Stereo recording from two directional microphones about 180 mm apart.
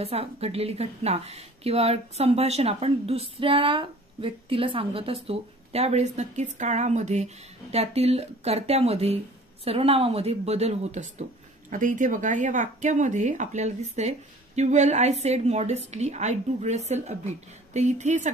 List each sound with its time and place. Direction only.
0.0 s a woman's voice: 35° right (ahead or behind)